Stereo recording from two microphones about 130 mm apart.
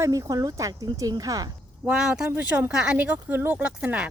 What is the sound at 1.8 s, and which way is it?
Speech, 10° right (ahead or behind).